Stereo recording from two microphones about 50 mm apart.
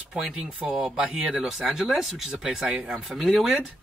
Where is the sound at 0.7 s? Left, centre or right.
Centre.